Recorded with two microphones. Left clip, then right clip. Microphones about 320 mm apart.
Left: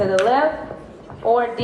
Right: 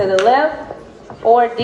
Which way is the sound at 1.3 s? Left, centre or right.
Right.